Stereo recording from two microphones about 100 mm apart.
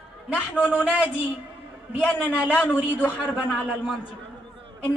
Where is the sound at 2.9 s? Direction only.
20° left (ahead or behind).